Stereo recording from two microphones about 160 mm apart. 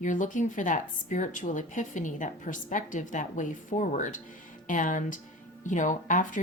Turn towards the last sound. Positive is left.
turn(degrees=55)  # may be behind; listen again after turning